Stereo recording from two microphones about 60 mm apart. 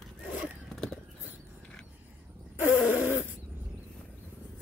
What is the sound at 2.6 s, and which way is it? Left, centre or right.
Insect, right.